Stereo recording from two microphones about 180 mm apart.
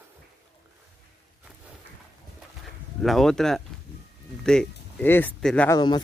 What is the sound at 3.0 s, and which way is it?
Speech, centre (ahead or behind).